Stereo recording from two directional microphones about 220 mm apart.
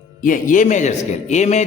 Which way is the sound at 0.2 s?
35° left (ahead or behind).